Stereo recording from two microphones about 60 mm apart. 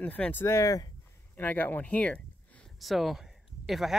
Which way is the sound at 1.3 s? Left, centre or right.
Left.